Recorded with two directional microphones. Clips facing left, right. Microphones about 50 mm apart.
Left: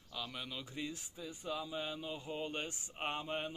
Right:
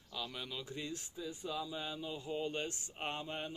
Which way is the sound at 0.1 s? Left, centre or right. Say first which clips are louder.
Right 1 dB; centre.